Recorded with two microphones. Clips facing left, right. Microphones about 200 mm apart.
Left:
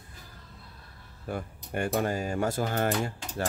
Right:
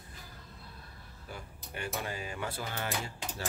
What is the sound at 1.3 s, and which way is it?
Speech, 50° left (ahead or behind).